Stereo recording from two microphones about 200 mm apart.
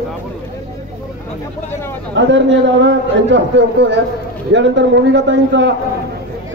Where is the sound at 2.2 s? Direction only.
65° right (ahead or behind).